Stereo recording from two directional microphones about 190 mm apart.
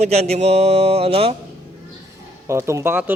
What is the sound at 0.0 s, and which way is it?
Speech, 35° right (ahead or behind).